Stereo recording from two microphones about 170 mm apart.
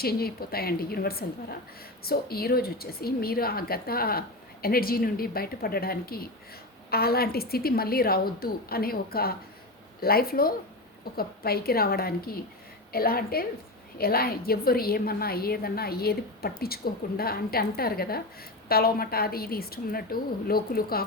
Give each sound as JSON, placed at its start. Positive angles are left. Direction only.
{"t": 0.0, "sound": "a woman's voice", "side_deg": 65}